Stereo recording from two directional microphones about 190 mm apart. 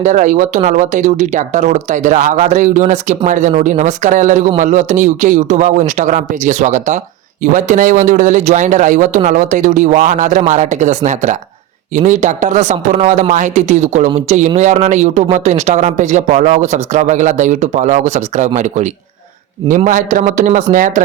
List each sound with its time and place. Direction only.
0.0 s a man's voice: 40° right (ahead or behind)